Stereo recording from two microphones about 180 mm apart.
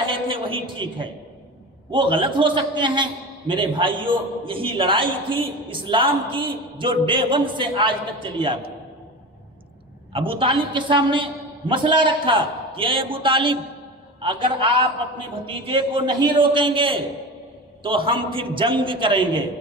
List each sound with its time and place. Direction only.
0.0 s a sound: 30° right (ahead or behind)
1.9 s a man's voice: 25° right (ahead or behind)
10.1 s a man's voice: 30° right (ahead or behind)